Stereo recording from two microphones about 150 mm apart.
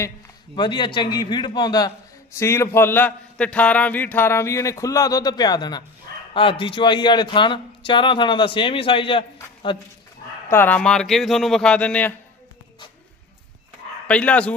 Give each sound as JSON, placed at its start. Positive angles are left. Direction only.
{"t": 0.5, "sound": "a man's voice", "side_deg": 30}
{"t": 10.5, "sound": "speech", "side_deg": 10}
{"t": 14.1, "sound": "a man's voice", "side_deg": 10}